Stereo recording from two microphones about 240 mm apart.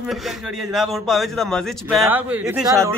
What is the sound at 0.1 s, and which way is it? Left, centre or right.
Speech, centre.